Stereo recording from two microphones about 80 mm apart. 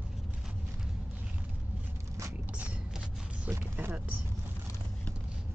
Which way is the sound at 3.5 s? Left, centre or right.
Right.